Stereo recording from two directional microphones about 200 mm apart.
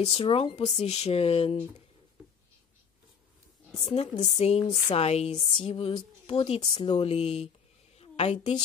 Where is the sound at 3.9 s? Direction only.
30° left (ahead or behind).